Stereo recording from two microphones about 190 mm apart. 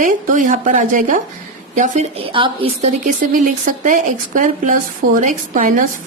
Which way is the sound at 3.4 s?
45° right (ahead or behind).